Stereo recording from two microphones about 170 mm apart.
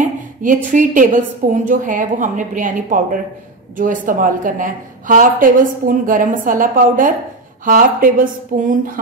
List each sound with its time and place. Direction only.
0.0 s a woman's voice: 50° right (ahead or behind)